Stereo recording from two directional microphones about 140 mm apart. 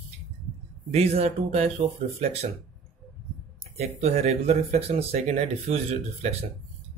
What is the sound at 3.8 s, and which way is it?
Speech, 50° right (ahead or behind).